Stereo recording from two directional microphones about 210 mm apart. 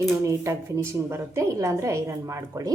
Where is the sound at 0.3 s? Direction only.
15° right (ahead or behind).